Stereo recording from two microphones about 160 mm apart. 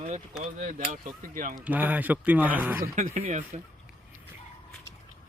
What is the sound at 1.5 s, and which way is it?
Speech, 10° right (ahead or behind).